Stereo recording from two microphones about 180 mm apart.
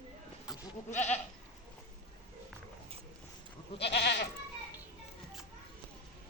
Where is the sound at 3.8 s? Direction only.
70° left (ahead or behind).